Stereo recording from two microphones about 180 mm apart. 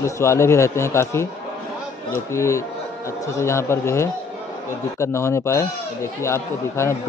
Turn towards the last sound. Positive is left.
turn(degrees=15)  # may be behind; listen again after turning